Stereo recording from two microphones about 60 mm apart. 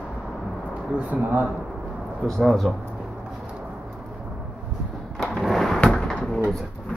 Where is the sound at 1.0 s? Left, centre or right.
Right.